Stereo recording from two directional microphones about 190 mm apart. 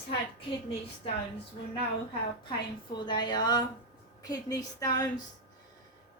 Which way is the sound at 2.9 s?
25° left (ahead or behind).